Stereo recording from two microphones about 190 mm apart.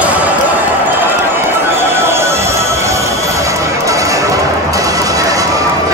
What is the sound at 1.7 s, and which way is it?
Music, 10° right (ahead or behind).